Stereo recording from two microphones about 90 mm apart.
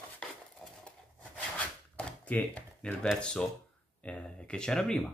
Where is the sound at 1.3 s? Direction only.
15° left (ahead or behind).